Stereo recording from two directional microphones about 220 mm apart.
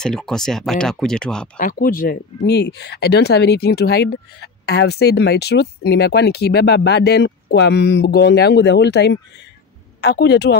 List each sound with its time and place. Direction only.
0.0 s speech: centre (ahead or behind)
1.6 s speech: 40° left (ahead or behind)